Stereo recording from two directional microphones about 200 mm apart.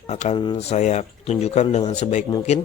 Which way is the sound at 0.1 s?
35° left (ahead or behind).